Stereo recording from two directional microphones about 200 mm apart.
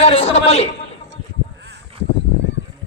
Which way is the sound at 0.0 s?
30° left (ahead or behind).